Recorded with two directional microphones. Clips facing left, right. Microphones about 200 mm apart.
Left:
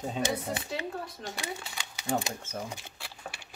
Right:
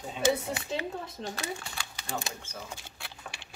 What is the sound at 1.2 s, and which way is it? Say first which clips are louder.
Speech: right 3 dB; 25° right (ahead or behind).